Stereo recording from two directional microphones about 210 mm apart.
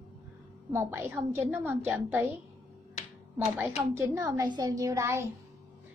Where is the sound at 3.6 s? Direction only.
10° right (ahead or behind).